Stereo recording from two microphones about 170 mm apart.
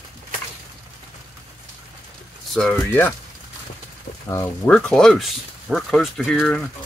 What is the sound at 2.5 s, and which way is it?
Speech, 10° left (ahead or behind).